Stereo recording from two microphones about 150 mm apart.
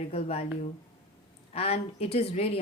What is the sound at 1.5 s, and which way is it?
Speech, 40° left (ahead or behind).